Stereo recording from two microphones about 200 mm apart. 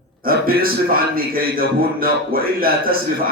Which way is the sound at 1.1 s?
45° right (ahead or behind).